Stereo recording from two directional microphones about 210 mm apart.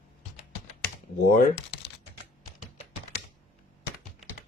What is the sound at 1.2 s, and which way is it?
Speech, 45° left (ahead or behind).